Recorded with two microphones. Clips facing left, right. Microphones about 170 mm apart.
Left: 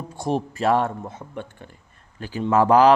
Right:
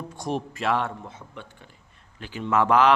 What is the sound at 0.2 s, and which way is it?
A man's voice, 35° left (ahead or behind).